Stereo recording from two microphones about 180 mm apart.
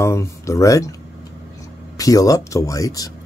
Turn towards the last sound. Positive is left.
turn(degrees=20)  # may be behind; listen again after turning